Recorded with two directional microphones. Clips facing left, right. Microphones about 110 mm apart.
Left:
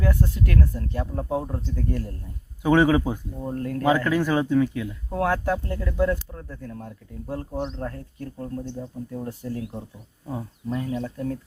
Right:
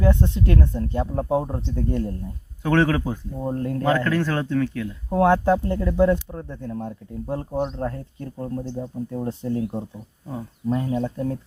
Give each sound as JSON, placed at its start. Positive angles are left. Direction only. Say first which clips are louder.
{"t": 0.0, "sound": "speech", "louder": "right 4 dB", "side_deg": -25}
{"t": 2.6, "sound": "a man's voice", "louder": "left 2 dB", "side_deg": 10}
{"t": 3.3, "sound": "speech", "louder": "right 3 dB", "side_deg": -25}
{"t": 3.8, "sound": "a man's voice", "louder": "left 1 dB", "side_deg": 10}
{"t": 5.0, "sound": "speech", "louder": "right 7 dB", "side_deg": -25}